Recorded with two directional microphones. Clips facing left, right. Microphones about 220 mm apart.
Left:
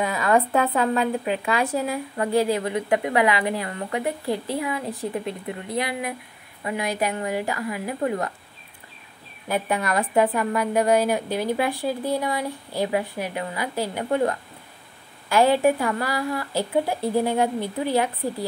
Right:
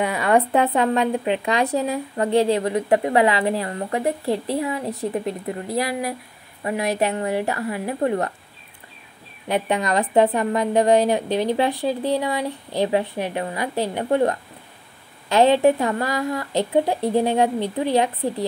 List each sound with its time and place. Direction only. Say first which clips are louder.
0.2 s a sound: right 2 dB; 35° right (ahead or behind)
0.7 s a woman's voice: right 2 dB; 30° right (ahead or behind)
9.5 s a woman's voice: right 3 dB; 20° right (ahead or behind)
10.4 s a woman's voice: right 3 dB; 35° right (ahead or behind)
11.0 s a woman's voice: right 3 dB; 20° right (ahead or behind)
15.2 s a woman's voice: right 3 dB; 20° right (ahead or behind)